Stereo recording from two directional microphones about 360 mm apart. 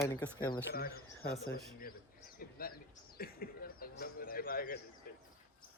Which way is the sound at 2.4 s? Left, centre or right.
Left.